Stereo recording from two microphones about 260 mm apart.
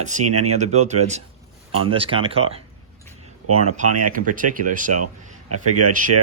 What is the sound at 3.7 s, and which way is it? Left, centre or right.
Speech, right.